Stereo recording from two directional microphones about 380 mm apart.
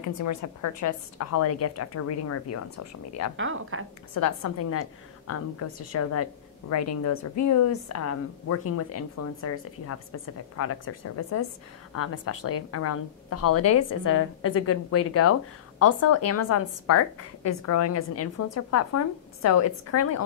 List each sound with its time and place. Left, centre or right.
0.0 s a woman's voice: left
3.3 s a woman's voice: right
4.1 s a woman's voice: left